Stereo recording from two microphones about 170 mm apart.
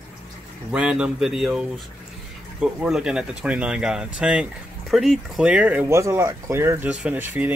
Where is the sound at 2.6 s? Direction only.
5° right (ahead or behind).